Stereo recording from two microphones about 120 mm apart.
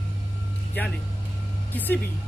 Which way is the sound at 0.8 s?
15° left (ahead or behind).